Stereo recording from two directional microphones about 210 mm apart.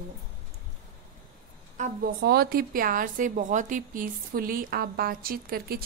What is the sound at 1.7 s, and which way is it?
A woman's voice, 40° right (ahead or behind).